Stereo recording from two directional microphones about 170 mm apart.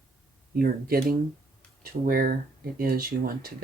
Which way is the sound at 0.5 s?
60° right (ahead or behind).